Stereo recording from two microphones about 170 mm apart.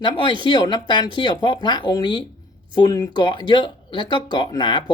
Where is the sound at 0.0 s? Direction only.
25° left (ahead or behind).